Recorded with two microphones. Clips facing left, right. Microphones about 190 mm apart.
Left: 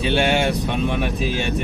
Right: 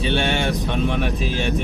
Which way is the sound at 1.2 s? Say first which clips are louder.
Even; centre (ahead or behind).